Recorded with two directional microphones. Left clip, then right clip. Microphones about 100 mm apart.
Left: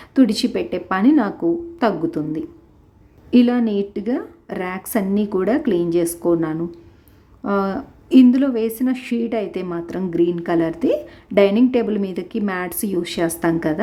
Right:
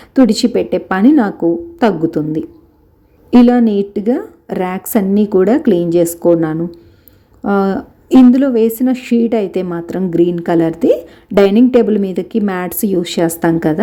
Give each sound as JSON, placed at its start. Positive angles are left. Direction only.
{"t": 0.0, "sound": "a woman's voice", "side_deg": -20}